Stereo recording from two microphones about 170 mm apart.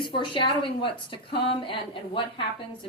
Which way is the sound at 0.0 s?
30° left (ahead or behind).